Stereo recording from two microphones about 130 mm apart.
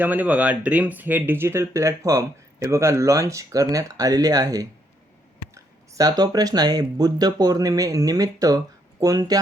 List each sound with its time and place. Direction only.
0.0 s speech: 15° right (ahead or behind); by 9.4 s 30° right (ahead or behind)